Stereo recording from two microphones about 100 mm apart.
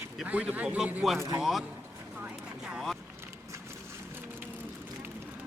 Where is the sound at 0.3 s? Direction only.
15° right (ahead or behind).